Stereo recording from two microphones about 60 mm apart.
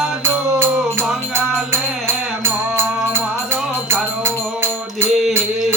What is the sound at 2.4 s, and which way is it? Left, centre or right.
Music, right.